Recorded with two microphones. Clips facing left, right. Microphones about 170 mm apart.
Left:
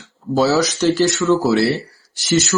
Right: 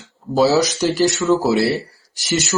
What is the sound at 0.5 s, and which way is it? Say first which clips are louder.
Speech: left 1 dB; 15° right (ahead or behind).